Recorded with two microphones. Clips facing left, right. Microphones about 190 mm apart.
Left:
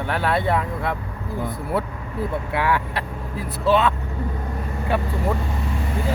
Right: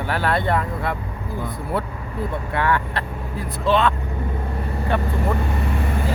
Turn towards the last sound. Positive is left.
turn(degrees=-60)  # may be behind; listen again after turning